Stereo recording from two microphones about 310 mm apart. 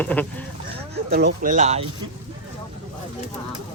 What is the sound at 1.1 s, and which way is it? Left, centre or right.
Speech, right.